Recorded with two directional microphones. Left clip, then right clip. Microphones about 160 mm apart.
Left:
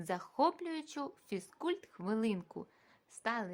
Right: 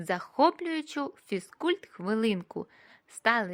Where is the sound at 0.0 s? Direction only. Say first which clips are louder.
Right 8 dB; 30° right (ahead or behind).